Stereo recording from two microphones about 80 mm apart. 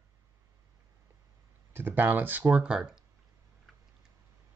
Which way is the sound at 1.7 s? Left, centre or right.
Right.